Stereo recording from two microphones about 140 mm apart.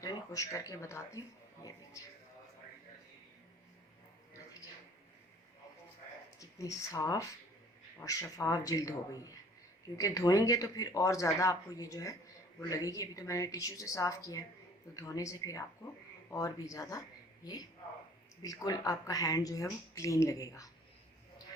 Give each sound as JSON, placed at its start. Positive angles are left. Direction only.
{"t": 0.0, "sound": "a man's voice", "side_deg": 25}
{"t": 6.4, "sound": "speech", "side_deg": 25}